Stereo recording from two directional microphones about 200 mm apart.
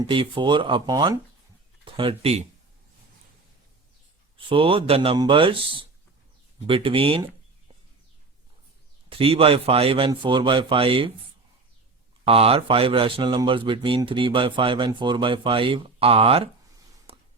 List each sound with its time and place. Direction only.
0.1 s a man's voice: 25° right (ahead or behind)
4.4 s a man's voice: 25° right (ahead or behind)
9.0 s a man's voice: 30° right (ahead or behind)
12.2 s a man's voice: 30° right (ahead or behind)
17.1 s a sound: 30° right (ahead or behind)